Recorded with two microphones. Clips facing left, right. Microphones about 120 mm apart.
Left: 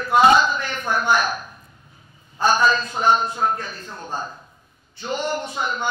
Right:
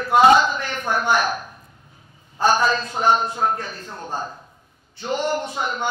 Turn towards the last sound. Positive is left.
turn(degrees=-55)  # may be behind; listen again after turning